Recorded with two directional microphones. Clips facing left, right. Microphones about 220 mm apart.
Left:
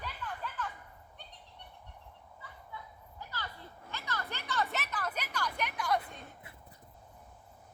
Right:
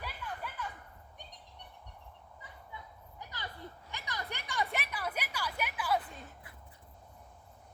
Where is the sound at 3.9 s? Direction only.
15° right (ahead or behind).